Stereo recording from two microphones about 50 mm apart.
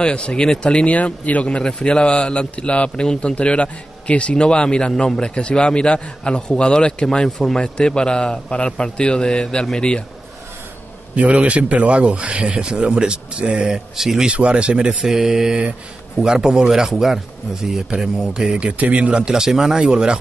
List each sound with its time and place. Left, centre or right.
0.0 s a man's voice: left
7.6 s a man's voice: centre
11.1 s speech: right
13.9 s speech: centre
14.2 s speech: right
15.0 s speech: centre